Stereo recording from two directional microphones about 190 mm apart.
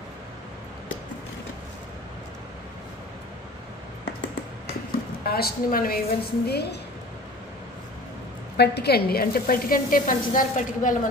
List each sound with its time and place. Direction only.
5.2 s speech: 55° left (ahead or behind)
8.5 s speech: 60° left (ahead or behind)